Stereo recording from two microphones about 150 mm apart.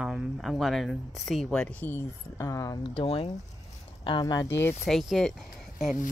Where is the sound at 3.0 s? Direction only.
45° left (ahead or behind).